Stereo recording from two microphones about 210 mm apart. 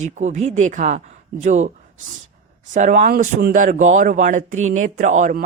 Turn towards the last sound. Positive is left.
turn(degrees=-35)  # may be behind; listen again after turning